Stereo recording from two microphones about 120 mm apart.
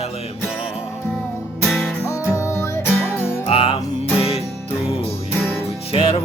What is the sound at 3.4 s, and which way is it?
Music, 50° left (ahead or behind).